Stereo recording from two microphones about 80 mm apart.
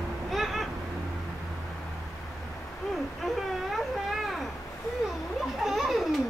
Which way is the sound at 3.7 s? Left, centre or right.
Centre.